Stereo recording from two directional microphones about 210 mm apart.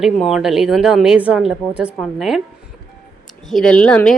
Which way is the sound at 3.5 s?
5° left (ahead or behind).